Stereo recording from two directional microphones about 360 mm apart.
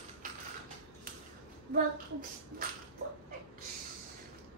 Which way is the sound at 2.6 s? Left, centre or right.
Right.